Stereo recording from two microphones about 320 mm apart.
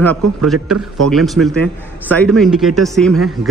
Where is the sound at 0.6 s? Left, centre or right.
Right.